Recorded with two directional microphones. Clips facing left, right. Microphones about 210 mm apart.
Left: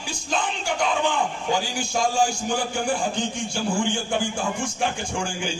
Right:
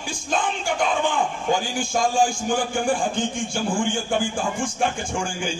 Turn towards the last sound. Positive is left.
turn(degrees=-50)  # may be behind; listen again after turning